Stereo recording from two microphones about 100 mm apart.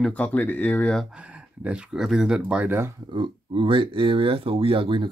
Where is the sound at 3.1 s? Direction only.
55° right (ahead or behind).